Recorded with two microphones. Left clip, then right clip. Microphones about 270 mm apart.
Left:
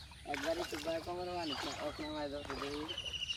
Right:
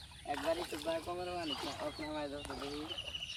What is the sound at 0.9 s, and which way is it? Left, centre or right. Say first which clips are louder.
Speech: right 2 dB; right.